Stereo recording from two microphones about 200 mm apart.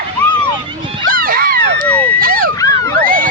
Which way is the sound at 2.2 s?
45° right (ahead or behind).